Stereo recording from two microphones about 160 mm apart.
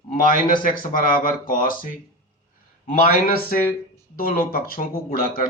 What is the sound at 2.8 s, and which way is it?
Speech, 60° left (ahead or behind).